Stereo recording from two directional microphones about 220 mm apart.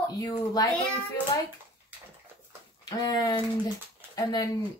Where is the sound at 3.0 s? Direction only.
20° left (ahead or behind).